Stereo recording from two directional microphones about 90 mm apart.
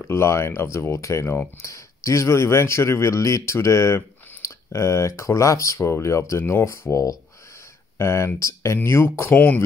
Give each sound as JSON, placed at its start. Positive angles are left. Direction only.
{"t": 0.0, "sound": "speech", "side_deg": 30}